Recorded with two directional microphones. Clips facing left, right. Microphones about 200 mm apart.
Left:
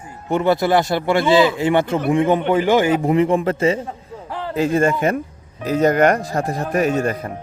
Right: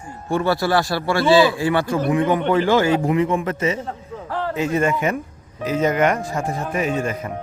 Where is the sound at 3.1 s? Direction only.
30° left (ahead or behind).